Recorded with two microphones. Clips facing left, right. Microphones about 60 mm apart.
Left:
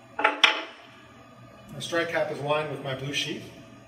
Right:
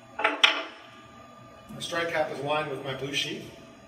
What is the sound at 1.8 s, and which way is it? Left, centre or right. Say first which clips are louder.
Speech: left 1 dB; centre.